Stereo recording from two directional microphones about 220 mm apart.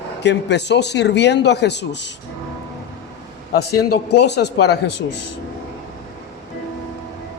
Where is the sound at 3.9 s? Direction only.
50° left (ahead or behind).